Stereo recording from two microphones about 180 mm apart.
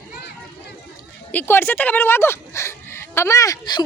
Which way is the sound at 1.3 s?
10° left (ahead or behind).